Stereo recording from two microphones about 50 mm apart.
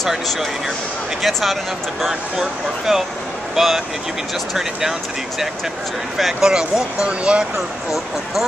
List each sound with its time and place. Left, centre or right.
1.2 s speech: centre
6.1 s speech: centre